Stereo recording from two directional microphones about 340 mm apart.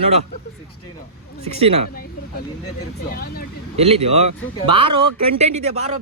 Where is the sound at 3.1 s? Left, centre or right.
Left.